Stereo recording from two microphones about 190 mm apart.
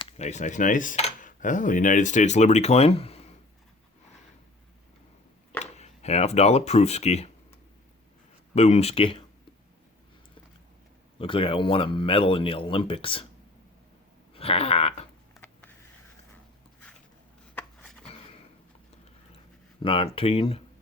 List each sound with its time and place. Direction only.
0.0 s cutlery: 35° left (ahead or behind)
5.7 s speech: 35° left (ahead or behind)
8.5 s cutlery: 35° left (ahead or behind)
11.2 s speech: 30° left (ahead or behind)
14.3 s cutlery: 30° left (ahead or behind)
17.5 s a sound: 5° left (ahead or behind)
19.8 s speech: 30° left (ahead or behind)